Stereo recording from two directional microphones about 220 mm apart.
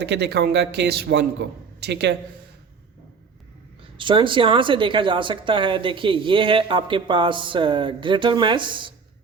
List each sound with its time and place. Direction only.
0.0 s a man's voice: 50° right (ahead or behind)
3.9 s speech: 20° right (ahead or behind)